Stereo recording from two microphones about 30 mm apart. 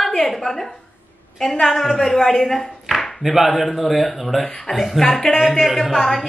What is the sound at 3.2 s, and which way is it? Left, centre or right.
A woman's voice, centre.